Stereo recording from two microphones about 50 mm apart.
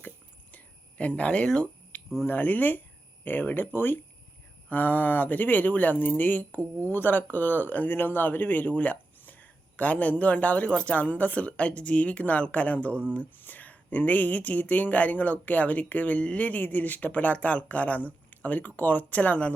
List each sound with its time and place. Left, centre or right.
0.5 s cricket: left
2.2 s speech: left
4.7 s speech: left